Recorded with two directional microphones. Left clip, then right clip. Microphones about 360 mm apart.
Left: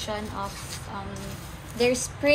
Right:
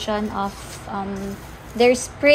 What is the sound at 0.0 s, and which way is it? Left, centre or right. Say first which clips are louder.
Speech: right 8 dB; right.